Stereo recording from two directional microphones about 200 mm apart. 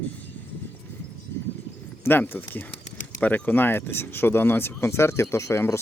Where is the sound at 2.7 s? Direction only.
35° left (ahead or behind).